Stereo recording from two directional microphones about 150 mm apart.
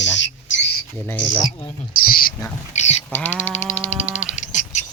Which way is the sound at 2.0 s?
75° left (ahead or behind).